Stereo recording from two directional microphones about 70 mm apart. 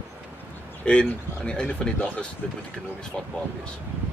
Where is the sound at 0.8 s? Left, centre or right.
Centre.